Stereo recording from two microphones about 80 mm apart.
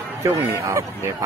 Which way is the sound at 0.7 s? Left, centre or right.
Right.